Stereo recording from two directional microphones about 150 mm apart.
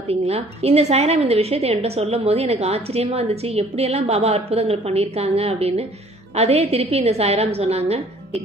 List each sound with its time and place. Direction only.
0.1 s a woman's voice: 45° right (ahead or behind)